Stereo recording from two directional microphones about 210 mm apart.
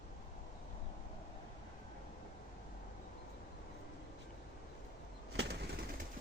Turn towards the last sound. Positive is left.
turn(degrees=-50)  # may be behind; listen again after turning